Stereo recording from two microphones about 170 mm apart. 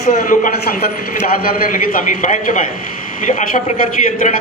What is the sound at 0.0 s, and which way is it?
Speech, 45° left (ahead or behind).